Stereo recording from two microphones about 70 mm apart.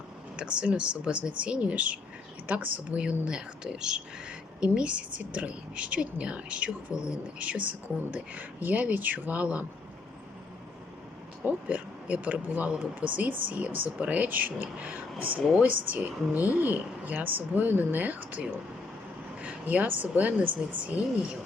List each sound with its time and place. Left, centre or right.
0.3 s speech: centre
11.4 s speech: right